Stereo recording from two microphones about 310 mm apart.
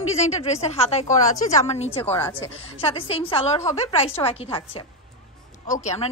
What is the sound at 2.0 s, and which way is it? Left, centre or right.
A woman's voice, centre.